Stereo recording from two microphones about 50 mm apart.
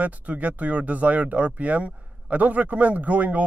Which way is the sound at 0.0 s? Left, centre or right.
Right.